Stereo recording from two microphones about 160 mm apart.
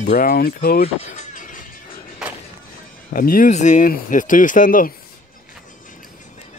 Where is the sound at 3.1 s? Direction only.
60° left (ahead or behind).